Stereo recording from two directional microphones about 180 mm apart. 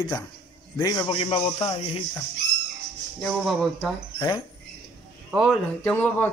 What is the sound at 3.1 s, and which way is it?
Speech, centre (ahead or behind).